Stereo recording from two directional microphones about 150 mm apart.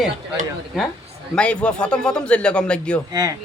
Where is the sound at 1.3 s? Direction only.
5° left (ahead or behind).